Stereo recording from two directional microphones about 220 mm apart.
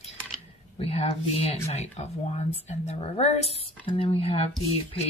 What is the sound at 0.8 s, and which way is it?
Speech, 30° left (ahead or behind).